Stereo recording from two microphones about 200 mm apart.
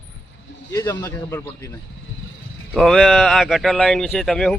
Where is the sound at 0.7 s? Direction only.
15° left (ahead or behind).